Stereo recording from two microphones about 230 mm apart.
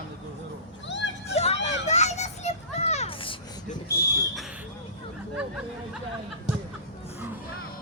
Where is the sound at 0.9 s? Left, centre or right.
Left.